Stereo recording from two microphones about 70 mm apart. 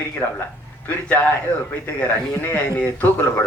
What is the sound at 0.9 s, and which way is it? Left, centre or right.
A man's voice, left.